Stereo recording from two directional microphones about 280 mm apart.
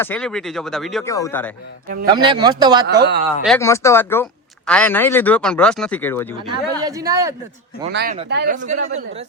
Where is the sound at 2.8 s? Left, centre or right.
Right.